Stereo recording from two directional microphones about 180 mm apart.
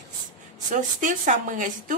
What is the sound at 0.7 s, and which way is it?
Speech, 45° right (ahead or behind).